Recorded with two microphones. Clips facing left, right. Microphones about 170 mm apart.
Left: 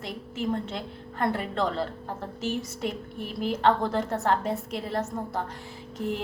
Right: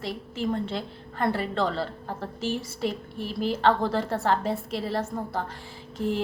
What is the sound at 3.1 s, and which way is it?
Speech, 30° right (ahead or behind).